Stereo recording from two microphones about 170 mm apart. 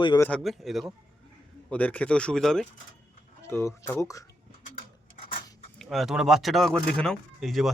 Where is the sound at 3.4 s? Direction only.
15° left (ahead or behind).